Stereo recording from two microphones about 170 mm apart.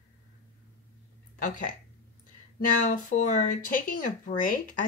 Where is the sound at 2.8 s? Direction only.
45° left (ahead or behind).